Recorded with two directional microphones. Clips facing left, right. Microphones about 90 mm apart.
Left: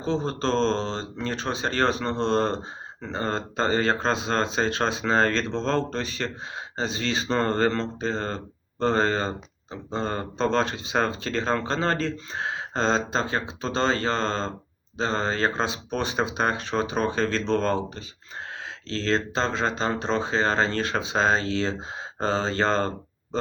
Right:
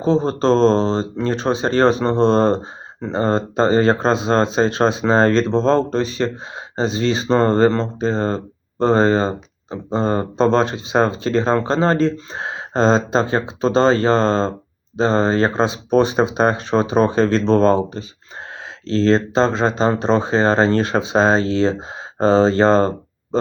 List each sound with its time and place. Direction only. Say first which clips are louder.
0.0 s speech: right 9 dB; 25° right (ahead or behind)